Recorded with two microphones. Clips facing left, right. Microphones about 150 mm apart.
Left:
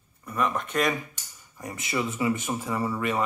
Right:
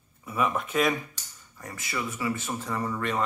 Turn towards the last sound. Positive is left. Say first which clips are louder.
# left 2 dB
turn(degrees=10)  # may be behind; listen again after turning